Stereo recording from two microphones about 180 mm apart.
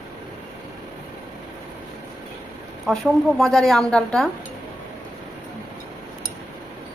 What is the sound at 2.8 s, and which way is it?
A woman's voice, centre (ahead or behind).